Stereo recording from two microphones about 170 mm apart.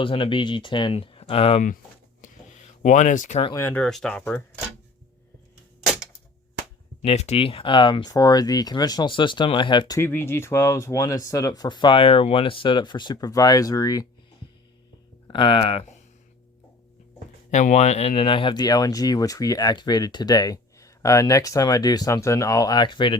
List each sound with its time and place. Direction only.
0.0 s speech: 30° left (ahead or behind)
2.2 s a sound: 45° left (ahead or behind)
3.5 s speech: 15° left (ahead or behind)
3.8 s speech: 5° left (ahead or behind)
7.0 s speech: 40° left (ahead or behind)
10.0 s speech: 15° left (ahead or behind)
15.3 s speech: 30° left (ahead or behind)
17.5 s speech: 45° left (ahead or behind); by 23.1 s 30° left (ahead or behind)